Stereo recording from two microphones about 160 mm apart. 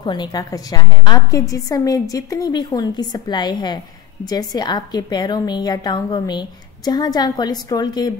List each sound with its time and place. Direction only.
0.0 s a woman's voice: 30° left (ahead or behind)